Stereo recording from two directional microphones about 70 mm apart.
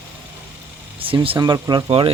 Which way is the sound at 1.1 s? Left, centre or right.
Right.